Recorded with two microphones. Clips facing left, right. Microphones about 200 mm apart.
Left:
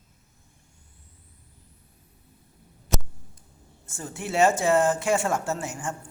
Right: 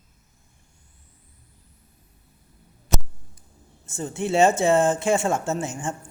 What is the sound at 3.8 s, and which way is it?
Speech, 25° right (ahead or behind).